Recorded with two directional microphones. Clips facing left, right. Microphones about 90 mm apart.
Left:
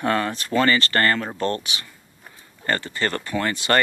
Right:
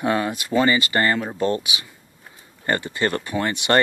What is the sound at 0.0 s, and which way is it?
Speech, 10° right (ahead or behind).